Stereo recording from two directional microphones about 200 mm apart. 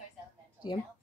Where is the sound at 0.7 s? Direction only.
25° left (ahead or behind).